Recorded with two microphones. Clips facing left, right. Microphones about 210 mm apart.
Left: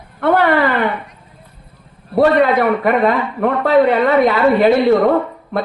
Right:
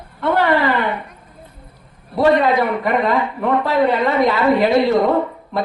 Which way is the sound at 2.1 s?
60° left (ahead or behind).